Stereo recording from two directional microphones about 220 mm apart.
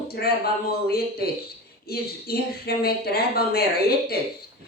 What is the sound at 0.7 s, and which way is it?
Speech, 45° left (ahead or behind).